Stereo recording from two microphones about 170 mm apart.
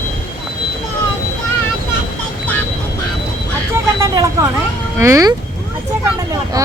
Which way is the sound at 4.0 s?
20° right (ahead or behind).